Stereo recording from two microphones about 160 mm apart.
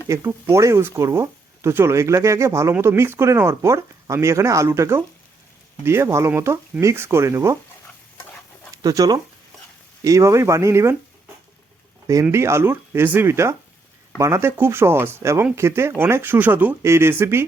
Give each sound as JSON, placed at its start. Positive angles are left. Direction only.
{"t": 0.1, "sound": "speech", "side_deg": -15}
{"t": 8.7, "sound": "speech", "side_deg": -20}
{"t": 12.2, "sound": "speech", "side_deg": -15}